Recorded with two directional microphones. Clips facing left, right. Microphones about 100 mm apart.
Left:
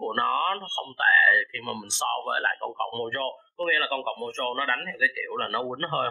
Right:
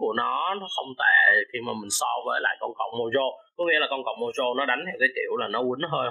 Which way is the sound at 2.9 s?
25° right (ahead or behind).